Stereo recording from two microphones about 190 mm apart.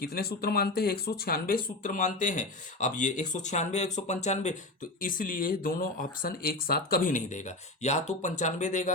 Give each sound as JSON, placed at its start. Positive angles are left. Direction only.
{"t": 0.0, "sound": "speech", "side_deg": 55}